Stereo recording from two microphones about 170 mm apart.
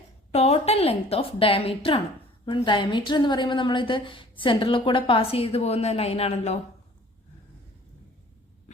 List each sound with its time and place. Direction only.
0.3 s a woman's voice: 40° left (ahead or behind)